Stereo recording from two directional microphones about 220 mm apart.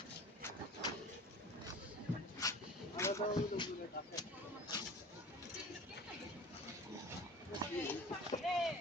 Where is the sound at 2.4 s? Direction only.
15° left (ahead or behind).